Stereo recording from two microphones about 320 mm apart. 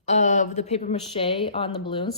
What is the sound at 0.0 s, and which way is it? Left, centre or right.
Speech, left.